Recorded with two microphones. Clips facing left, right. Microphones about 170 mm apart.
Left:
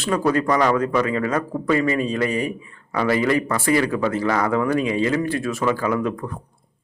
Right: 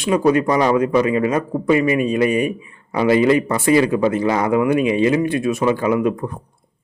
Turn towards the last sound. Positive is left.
turn(degrees=-20)  # may be behind; listen again after turning